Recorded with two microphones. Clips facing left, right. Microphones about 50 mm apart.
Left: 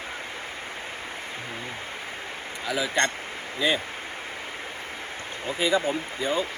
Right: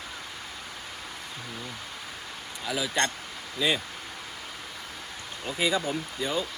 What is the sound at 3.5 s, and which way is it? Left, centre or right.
Speech, left.